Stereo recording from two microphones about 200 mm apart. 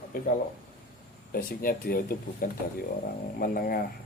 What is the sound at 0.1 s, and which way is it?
Speech, 45° left (ahead or behind).